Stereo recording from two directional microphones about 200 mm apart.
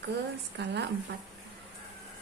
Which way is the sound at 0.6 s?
60° right (ahead or behind).